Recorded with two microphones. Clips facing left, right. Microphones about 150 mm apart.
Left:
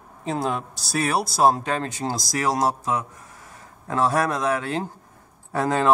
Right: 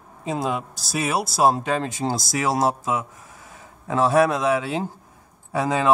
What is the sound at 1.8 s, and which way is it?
Speech, 20° right (ahead or behind).